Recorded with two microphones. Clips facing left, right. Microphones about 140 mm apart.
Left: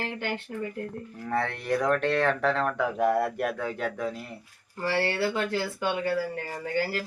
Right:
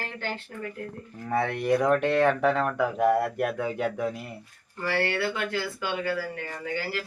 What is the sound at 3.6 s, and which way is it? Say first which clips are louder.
Speech: right 3 dB; 15° right (ahead or behind).